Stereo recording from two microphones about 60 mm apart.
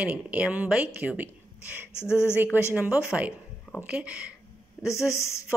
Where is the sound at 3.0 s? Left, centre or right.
Centre.